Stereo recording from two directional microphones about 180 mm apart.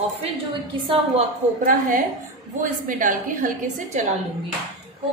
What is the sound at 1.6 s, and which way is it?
A woman's voice, 50° right (ahead or behind).